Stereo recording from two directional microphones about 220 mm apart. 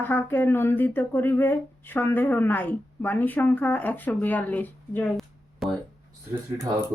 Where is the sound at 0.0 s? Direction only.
10° left (ahead or behind).